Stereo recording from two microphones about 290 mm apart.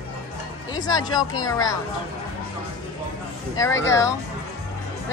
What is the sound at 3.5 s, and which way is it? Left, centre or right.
Speech, centre.